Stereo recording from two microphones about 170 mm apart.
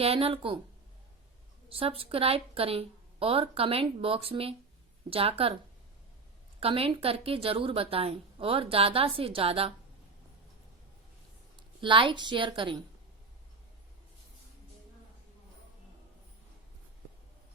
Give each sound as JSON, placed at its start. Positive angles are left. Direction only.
{"t": 0.0, "sound": "a woman's voice", "side_deg": -35}
{"t": 1.7, "sound": "a woman's voice", "side_deg": -35}
{"t": 6.6, "sound": "a woman's voice", "side_deg": -35}
{"t": 11.8, "sound": "a woman's voice", "side_deg": -30}